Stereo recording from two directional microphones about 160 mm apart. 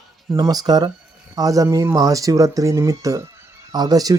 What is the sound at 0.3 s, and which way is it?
Speech, 25° right (ahead or behind).